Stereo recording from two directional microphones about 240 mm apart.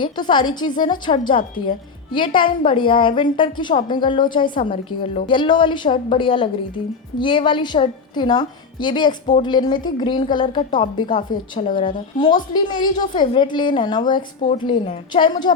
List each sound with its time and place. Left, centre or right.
0.0 s a woman's voice: centre